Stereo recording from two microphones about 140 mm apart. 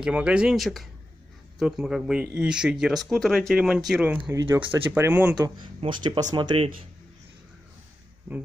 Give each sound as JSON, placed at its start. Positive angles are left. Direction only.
{"t": 0.0, "sound": "speech", "side_deg": -5}
{"t": 4.3, "sound": "speech", "side_deg": -20}
{"t": 5.6, "sound": "speech", "side_deg": -35}